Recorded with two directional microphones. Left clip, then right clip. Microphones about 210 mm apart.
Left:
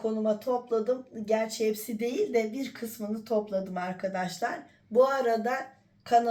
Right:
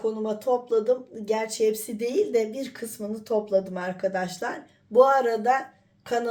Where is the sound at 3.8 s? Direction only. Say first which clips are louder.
Right 4 dB; 40° right (ahead or behind).